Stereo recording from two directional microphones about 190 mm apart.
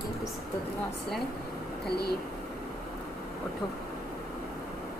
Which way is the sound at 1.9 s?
55° left (ahead or behind).